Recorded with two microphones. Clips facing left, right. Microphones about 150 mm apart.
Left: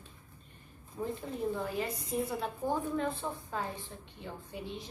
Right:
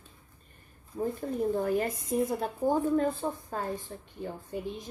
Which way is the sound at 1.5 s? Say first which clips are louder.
Right 7 dB; 50° right (ahead or behind).